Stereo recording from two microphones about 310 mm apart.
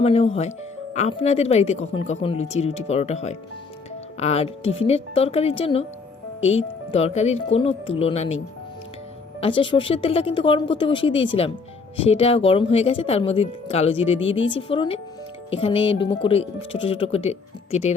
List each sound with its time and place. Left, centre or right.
0.0 s speech: centre
9.4 s speech: centre